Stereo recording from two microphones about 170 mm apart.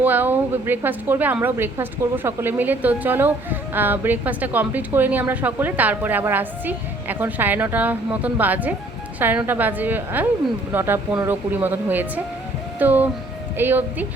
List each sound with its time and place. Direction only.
0.0 s a woman's voice: 10° right (ahead or behind)